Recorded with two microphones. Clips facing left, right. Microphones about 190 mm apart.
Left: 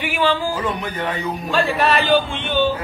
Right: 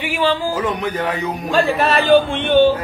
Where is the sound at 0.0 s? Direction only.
30° right (ahead or behind).